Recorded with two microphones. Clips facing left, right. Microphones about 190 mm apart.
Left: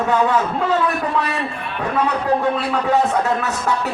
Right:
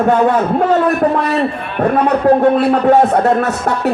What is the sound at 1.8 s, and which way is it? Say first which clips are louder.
A woman's voice: right 9 dB; 50° right (ahead or behind).